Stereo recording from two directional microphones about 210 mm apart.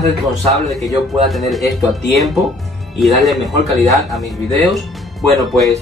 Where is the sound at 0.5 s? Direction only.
Centre (ahead or behind).